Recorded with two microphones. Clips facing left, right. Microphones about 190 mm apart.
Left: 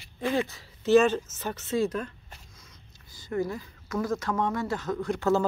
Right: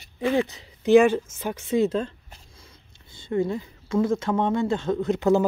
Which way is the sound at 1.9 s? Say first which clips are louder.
Right 6 dB; 25° right (ahead or behind).